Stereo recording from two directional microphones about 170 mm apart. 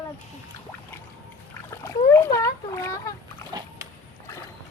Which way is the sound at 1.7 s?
15° left (ahead or behind).